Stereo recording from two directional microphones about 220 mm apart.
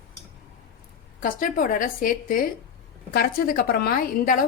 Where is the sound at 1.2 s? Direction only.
40° left (ahead or behind).